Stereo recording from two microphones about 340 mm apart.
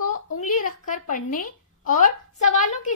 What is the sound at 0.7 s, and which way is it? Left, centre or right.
Speech, left.